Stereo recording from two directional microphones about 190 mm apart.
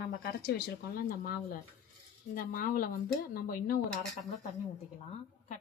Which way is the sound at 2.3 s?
50° left (ahead or behind).